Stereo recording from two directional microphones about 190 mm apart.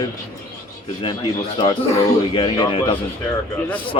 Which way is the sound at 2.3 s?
25° left (ahead or behind).